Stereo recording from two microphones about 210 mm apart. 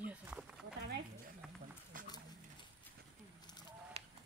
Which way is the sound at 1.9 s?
40° right (ahead or behind).